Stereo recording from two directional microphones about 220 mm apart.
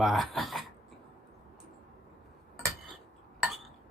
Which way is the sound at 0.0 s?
Centre (ahead or behind).